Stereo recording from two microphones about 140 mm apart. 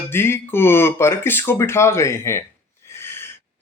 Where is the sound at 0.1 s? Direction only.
15° left (ahead or behind).